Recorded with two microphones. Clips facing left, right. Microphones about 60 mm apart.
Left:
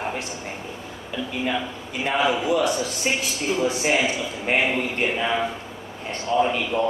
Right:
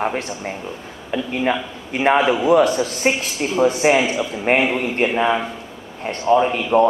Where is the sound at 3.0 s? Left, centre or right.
Right.